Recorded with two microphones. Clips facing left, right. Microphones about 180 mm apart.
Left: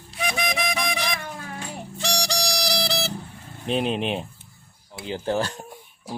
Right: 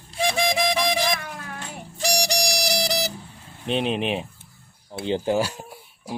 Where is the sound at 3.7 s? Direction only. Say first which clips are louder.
Even; centre (ahead or behind).